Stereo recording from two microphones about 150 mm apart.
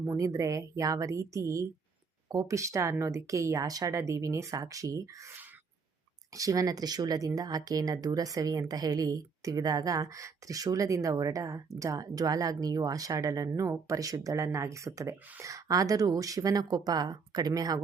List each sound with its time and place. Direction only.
0.0 s speech: 20° right (ahead or behind)